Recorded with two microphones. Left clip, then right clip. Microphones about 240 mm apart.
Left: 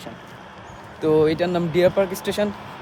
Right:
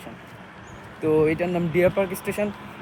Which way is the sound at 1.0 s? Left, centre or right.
Centre.